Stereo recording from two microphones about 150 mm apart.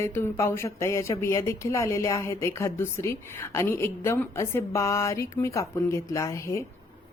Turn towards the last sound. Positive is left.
turn(degrees=20)  # may be behind; listen again after turning